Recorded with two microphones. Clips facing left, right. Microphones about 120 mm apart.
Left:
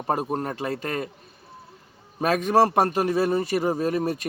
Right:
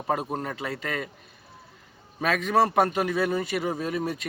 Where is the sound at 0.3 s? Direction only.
45° left (ahead or behind).